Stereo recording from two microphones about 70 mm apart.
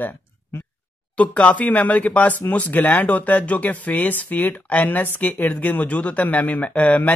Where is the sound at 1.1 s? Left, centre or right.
Centre.